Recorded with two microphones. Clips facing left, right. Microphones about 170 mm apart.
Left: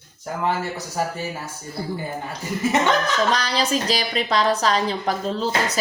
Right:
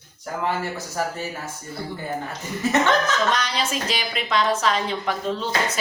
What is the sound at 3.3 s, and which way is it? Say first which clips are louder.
Speech: left 3 dB; 35° left (ahead or behind).